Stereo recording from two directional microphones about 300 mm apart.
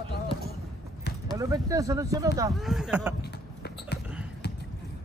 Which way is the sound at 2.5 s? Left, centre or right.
Centre.